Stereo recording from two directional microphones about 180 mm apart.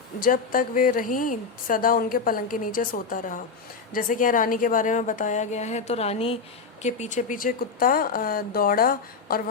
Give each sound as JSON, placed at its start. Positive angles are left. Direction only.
{"t": 0.2, "sound": "a woman's voice", "side_deg": 50}